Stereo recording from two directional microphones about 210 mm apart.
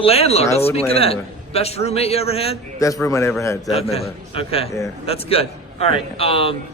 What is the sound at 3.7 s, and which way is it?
A man's voice, 30° left (ahead or behind).